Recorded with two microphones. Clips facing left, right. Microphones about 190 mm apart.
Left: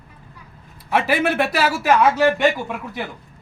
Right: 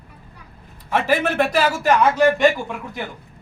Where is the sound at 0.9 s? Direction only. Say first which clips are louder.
Left 1 dB; 10° left (ahead or behind).